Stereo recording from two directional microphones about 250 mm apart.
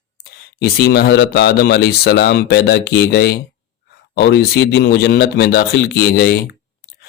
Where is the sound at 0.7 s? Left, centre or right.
Left.